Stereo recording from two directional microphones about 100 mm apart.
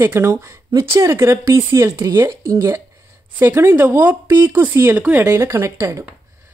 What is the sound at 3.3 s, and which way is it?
Speech, 25° right (ahead or behind).